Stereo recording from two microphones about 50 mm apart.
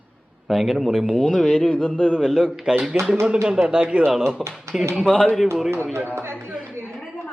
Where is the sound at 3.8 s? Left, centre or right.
Right.